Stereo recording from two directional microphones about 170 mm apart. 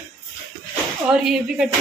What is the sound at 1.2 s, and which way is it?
Speech, centre (ahead or behind).